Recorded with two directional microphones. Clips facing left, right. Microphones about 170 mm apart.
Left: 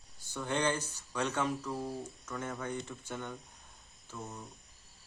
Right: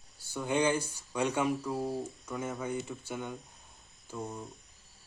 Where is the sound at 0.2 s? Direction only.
10° right (ahead or behind).